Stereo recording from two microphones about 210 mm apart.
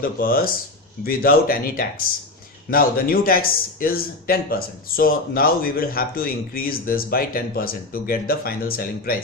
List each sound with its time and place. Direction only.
0.0 s a man's voice: 45° left (ahead or behind)